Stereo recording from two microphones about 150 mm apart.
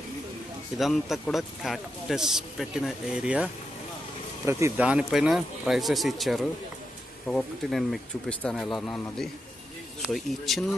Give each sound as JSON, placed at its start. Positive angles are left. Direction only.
{"t": 0.7, "sound": "speech", "side_deg": 0}
{"t": 4.5, "sound": "speech", "side_deg": -20}
{"t": 4.8, "sound": "speech", "side_deg": -5}